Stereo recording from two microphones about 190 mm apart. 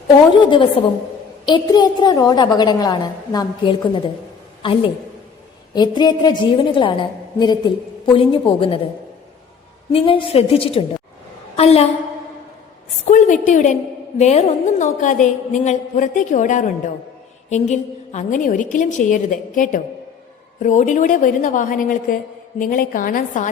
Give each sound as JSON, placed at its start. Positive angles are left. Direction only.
{"t": 0.3, "sound": "a woman's voice", "side_deg": 25}
{"t": 9.9, "sound": "a woman's voice", "side_deg": 30}
{"t": 13.1, "sound": "a woman's voice", "side_deg": 40}